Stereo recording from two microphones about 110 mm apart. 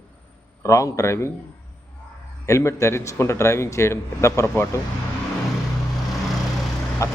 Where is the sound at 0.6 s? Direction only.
30° left (ahead or behind).